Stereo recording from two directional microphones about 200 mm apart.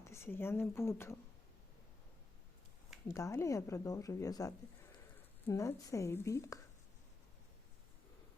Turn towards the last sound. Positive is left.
turn(degrees=15)  # may be behind; listen again after turning